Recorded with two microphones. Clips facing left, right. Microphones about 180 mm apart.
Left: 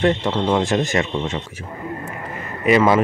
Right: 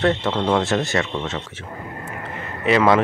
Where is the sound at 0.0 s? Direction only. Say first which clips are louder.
Left 1 dB; 15° left (ahead or behind).